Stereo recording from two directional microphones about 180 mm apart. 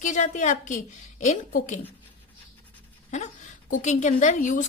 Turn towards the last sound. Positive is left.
turn(degrees=45)  # may be behind; listen again after turning